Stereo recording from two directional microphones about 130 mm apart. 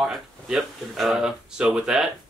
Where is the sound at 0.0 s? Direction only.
Centre (ahead or behind).